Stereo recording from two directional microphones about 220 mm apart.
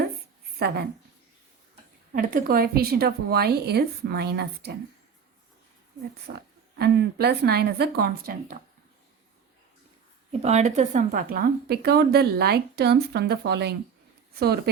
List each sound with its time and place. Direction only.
0.6 s a woman's voice: 45° right (ahead or behind)
2.1 s a woman's voice: 40° right (ahead or behind)
6.2 s a woman's voice: 45° right (ahead or behind)
10.4 s a woman's voice: 30° right (ahead or behind); by 14.7 s 45° right (ahead or behind)